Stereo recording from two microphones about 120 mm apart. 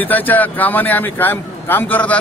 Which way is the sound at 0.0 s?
15° left (ahead or behind).